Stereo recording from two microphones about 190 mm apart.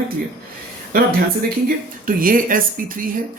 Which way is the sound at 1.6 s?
45° right (ahead or behind).